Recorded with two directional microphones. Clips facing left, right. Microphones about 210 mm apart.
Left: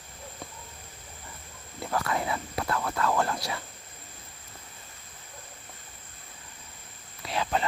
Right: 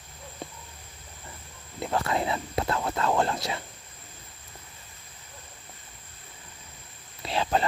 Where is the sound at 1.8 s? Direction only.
25° right (ahead or behind).